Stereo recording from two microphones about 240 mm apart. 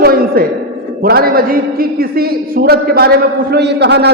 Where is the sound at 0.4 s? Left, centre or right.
Right.